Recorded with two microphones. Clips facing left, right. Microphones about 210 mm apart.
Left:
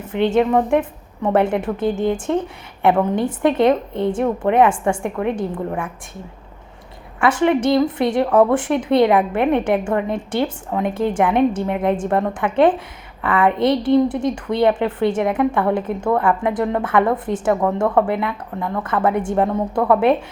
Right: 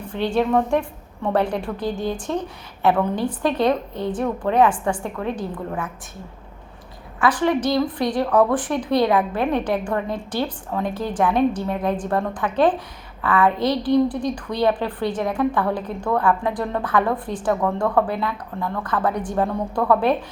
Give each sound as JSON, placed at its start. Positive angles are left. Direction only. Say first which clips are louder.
{"t": 0.0, "sound": "a woman's voice", "louder": "left 5 dB", "side_deg": 20}
{"t": 7.2, "sound": "a woman's voice", "louder": "left 3 dB", "side_deg": 25}